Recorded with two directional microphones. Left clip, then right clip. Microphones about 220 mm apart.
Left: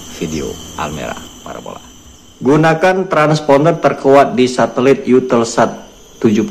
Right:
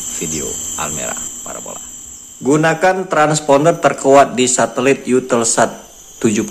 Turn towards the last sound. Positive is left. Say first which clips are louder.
# left 3 dB
turn(degrees=-15)  # may be behind; listen again after turning